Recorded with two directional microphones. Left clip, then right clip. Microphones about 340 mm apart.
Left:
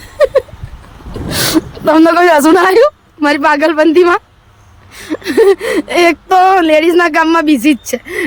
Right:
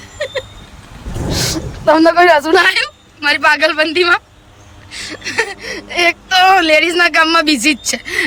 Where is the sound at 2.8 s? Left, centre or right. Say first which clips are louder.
Left 8 dB; centre.